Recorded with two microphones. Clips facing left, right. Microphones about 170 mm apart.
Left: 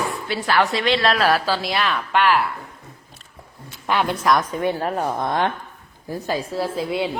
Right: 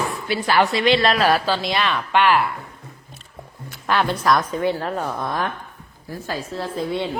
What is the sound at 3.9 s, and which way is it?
A woman's voice, 15° left (ahead or behind).